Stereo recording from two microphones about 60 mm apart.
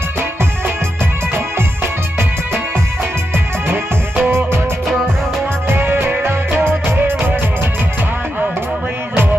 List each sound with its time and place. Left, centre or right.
1.3 s music: right
5.6 s music: right